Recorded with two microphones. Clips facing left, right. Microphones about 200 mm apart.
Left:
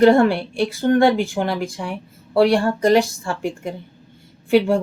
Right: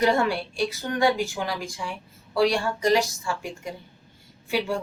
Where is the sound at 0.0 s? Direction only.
55° left (ahead or behind).